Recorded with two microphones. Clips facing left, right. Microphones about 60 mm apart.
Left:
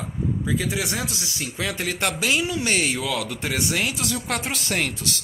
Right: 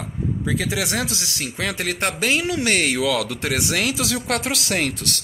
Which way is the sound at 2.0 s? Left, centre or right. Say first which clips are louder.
Right 1 dB; right.